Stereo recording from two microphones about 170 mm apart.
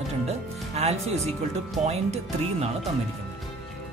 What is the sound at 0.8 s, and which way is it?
Speech, 35° right (ahead or behind).